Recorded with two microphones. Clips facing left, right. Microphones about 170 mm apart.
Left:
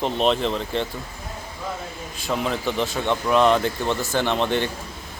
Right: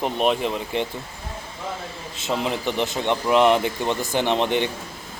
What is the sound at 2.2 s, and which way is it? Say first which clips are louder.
A man's voice: even; 20° right (ahead or behind).